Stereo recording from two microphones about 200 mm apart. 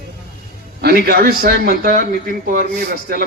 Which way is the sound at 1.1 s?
50° right (ahead or behind).